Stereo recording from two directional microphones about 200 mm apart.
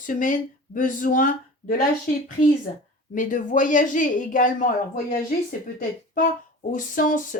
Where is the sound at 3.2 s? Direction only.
40° left (ahead or behind).